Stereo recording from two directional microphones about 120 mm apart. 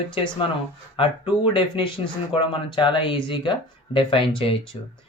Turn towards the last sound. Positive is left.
turn(degrees=50)  # may be behind; listen again after turning